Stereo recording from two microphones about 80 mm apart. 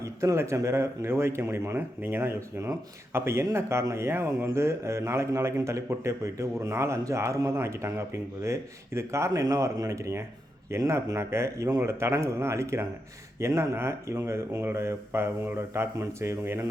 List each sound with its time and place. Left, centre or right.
0.0 s speech: right